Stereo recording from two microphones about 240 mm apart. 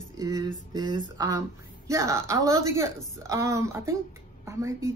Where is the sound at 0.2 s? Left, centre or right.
Centre.